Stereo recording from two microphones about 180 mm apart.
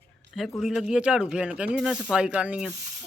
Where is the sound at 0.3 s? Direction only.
Centre (ahead or behind).